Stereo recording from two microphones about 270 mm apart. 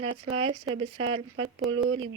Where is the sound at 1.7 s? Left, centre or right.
Right.